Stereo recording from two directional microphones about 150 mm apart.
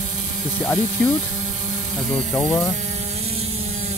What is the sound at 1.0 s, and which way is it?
Speech, 5° left (ahead or behind).